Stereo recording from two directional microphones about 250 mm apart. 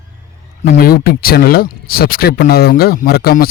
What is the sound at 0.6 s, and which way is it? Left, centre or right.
Speech, left.